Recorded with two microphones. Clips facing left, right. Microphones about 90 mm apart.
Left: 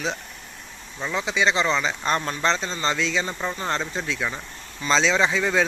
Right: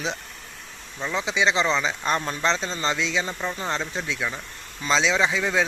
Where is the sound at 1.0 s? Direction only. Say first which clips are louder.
Even; centre (ahead or behind).